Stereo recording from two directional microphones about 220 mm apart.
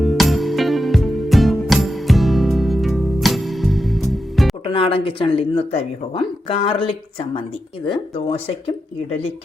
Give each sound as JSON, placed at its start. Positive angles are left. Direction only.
{"t": 0.0, "sound": "music", "side_deg": 0}
{"t": 4.6, "sound": "speech", "side_deg": 25}